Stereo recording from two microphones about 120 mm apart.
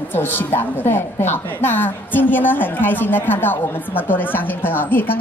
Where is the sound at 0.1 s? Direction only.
15° left (ahead or behind).